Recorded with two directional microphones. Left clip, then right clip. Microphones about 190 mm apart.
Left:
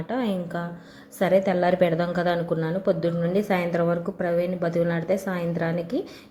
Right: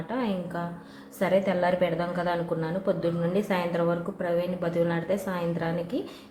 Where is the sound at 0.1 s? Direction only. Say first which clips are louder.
Left 3 dB; 25° left (ahead or behind).